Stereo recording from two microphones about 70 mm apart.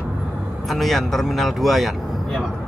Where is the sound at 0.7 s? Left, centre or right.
Centre.